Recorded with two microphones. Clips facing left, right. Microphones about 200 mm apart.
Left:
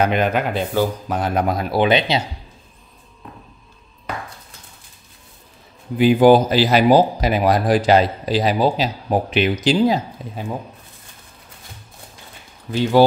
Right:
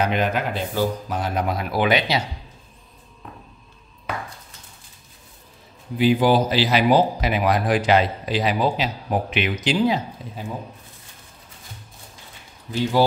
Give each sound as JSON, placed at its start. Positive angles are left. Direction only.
{"t": 0.0, "sound": "speech", "side_deg": 55}
{"t": 1.7, "sound": "speech", "side_deg": 25}
{"t": 5.9, "sound": "speech", "side_deg": 50}